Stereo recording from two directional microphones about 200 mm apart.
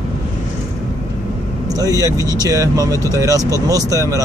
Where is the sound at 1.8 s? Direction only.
15° right (ahead or behind).